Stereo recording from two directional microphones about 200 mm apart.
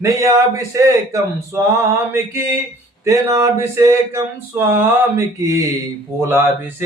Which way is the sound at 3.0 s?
15° right (ahead or behind).